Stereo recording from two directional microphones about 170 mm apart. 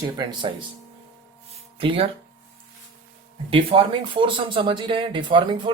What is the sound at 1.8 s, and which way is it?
Speech, 30° right (ahead or behind).